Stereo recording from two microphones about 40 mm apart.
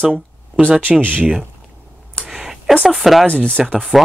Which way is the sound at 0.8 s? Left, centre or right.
Right.